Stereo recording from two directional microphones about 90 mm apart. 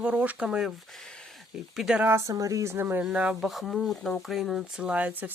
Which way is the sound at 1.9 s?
15° right (ahead or behind).